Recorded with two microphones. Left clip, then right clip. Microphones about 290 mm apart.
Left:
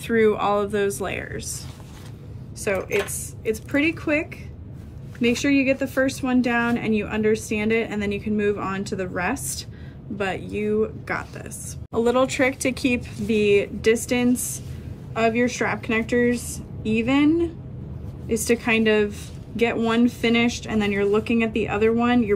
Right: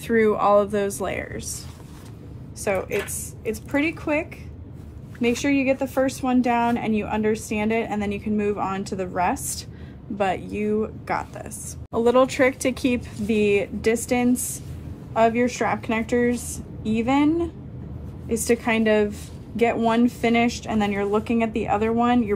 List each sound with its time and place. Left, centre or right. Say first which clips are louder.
0.0 s speech: even; centre
2.6 s speech: left 1 dB; centre